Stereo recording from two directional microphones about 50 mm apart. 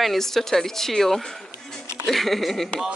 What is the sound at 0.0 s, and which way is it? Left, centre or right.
A woman's voice, centre.